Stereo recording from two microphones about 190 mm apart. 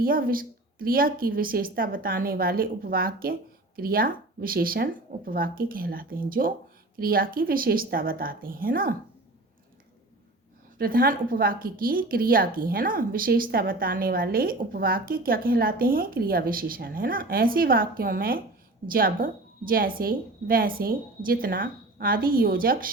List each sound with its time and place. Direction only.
0.0 s a woman's voice: 50° right (ahead or behind)
10.8 s a woman's voice: 50° right (ahead or behind)